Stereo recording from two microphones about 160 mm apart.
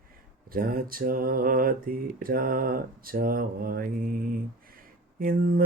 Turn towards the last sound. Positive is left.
turn(degrees=-65)  # may be behind; listen again after turning